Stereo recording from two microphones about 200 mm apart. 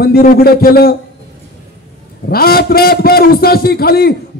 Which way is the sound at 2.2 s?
50° left (ahead or behind).